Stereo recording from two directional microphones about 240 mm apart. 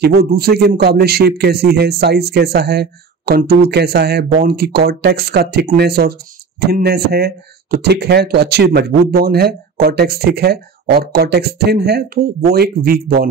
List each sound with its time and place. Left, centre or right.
0.2 s a man's voice: right